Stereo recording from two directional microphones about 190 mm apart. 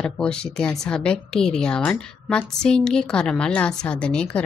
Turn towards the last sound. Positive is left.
turn(degrees=5)  # may be behind; listen again after turning